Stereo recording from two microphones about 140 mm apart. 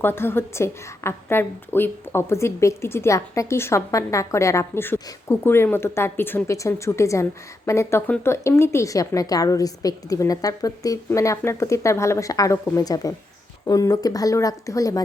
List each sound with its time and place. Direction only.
0.0 s speech: 15° left (ahead or behind)